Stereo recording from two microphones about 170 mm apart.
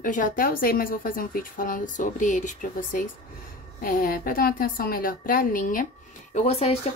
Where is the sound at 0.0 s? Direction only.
50° left (ahead or behind).